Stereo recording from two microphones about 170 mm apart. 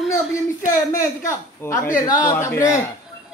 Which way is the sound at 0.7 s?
20° left (ahead or behind).